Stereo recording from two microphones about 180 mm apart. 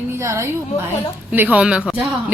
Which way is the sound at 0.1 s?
15° right (ahead or behind).